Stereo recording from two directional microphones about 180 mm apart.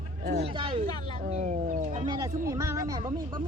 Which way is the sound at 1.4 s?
45° right (ahead or behind).